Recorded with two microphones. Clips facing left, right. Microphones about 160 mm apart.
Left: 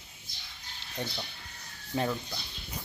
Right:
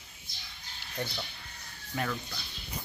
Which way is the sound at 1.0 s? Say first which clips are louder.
Even; 15° left (ahead or behind).